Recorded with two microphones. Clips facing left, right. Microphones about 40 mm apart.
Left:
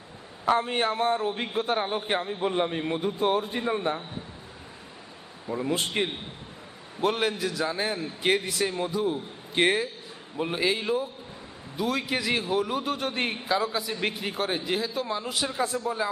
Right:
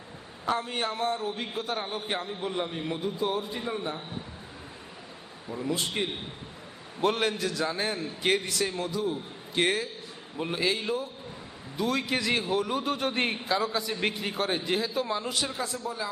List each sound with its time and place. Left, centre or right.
0.4 s a man's voice: left
5.5 s a man's voice: left
7.0 s a man's voice: centre; by 9.9 s left
10.3 s a man's voice: centre
15.4 s a man's voice: left